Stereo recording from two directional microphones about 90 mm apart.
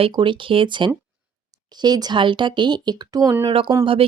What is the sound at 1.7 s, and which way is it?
Speech, 50° right (ahead or behind).